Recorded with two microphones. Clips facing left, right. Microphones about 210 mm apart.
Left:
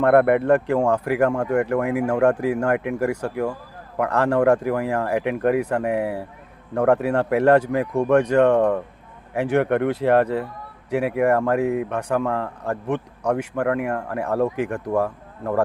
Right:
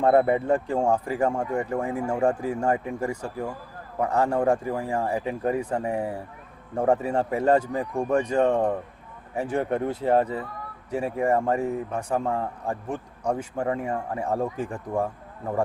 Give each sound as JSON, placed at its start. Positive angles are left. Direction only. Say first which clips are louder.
{"t": 0.0, "sound": "speech", "louder": "left 4 dB", "side_deg": 70}